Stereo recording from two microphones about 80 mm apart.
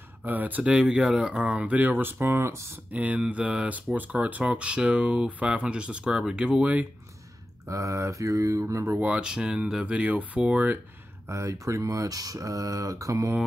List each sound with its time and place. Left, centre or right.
0.2 s speech: right
2.9 s speech: centre
7.6 s mantra: right
8.9 s speech: centre
11.2 s speech: right